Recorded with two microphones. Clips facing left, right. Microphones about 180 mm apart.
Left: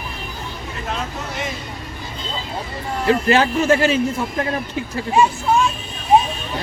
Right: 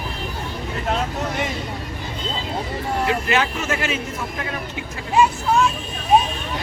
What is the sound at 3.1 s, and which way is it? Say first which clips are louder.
A man's voice: left 9 dB; 35° left (ahead or behind).